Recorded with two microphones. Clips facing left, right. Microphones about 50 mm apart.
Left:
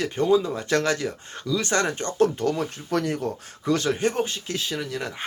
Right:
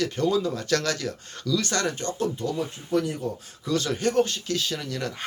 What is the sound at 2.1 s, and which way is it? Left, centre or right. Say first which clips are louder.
Speech: left 5 dB; left.